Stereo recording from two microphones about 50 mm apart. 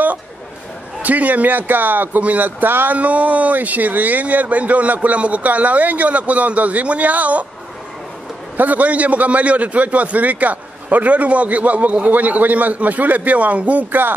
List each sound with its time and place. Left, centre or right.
1.0 s a man's voice: right
3.0 s a man's voice: right
8.5 s a man's voice: right